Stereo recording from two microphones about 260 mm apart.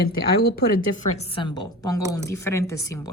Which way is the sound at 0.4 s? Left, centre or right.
Left.